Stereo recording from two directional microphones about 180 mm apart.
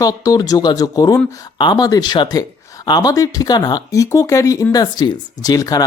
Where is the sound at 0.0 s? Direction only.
20° left (ahead or behind).